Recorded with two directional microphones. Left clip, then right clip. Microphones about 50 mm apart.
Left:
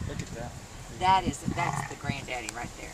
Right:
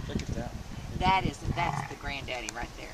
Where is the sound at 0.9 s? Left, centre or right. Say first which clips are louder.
Left 3 dB; right.